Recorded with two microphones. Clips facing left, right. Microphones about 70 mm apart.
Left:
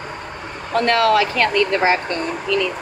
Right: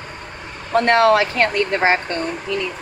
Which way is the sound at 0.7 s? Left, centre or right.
Right.